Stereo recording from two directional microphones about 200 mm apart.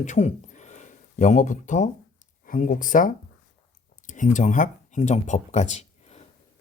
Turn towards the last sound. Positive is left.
turn(degrees=35)  # may be behind; listen again after turning